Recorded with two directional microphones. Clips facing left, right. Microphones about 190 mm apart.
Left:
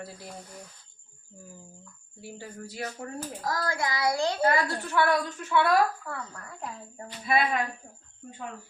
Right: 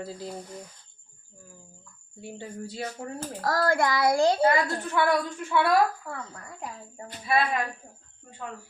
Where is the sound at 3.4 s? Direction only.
60° right (ahead or behind).